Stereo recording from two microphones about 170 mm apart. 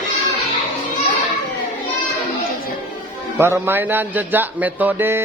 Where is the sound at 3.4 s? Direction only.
15° right (ahead or behind).